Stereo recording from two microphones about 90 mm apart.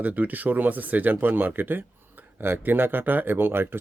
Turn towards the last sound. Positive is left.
turn(degrees=-25)  # may be behind; listen again after turning